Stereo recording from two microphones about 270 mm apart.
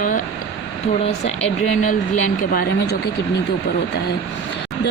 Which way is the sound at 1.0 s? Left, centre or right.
Left.